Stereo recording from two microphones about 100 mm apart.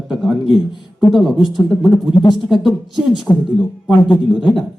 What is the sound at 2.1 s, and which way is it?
Speech, 50° left (ahead or behind).